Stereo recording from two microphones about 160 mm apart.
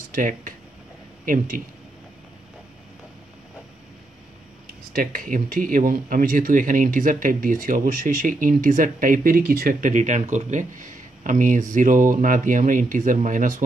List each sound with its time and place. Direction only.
0.1 s speech: 60° right (ahead or behind)
4.9 s speech: 60° right (ahead or behind)